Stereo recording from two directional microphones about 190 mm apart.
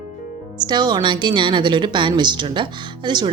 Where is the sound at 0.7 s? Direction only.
25° right (ahead or behind).